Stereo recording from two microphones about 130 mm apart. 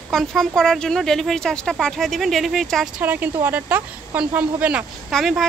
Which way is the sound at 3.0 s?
15° right (ahead or behind).